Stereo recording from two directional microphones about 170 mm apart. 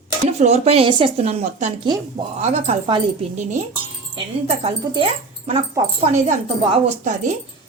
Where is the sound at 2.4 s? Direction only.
40° right (ahead or behind).